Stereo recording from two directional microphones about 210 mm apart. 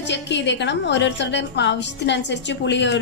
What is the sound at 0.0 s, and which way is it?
A woman's voice, 55° left (ahead or behind).